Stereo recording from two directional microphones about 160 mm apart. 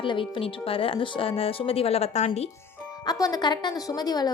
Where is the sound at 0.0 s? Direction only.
30° left (ahead or behind).